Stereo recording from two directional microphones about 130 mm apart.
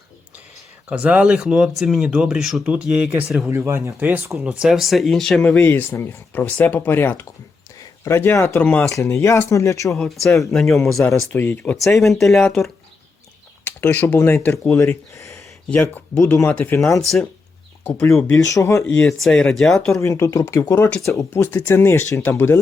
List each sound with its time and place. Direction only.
0.9 s speech: 10° right (ahead or behind)
3.2 s speech: centre (ahead or behind)
3.5 s speech: 20° right (ahead or behind); by 8.9 s 10° left (ahead or behind)
9.0 s speech: 25° left (ahead or behind)
9.9 s speech: centre (ahead or behind)
11.1 s speech: 15° left (ahead or behind)
12.0 s speech: centre (ahead or behind)
13.8 s speech: 15° left (ahead or behind)
15.7 s speech: 10° left (ahead or behind)
18.3 s speech: 25° left (ahead or behind)
18.9 s speech: 5° left (ahead or behind)
20.0 s speech: 20° left (ahead or behind)